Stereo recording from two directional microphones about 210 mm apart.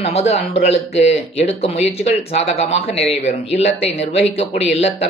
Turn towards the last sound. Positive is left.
turn(degrees=30)  # may be behind; listen again after turning